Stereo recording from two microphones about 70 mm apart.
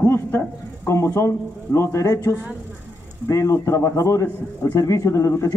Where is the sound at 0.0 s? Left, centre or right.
Left.